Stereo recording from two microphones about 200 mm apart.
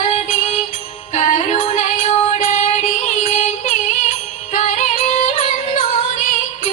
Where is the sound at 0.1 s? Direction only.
35° left (ahead or behind).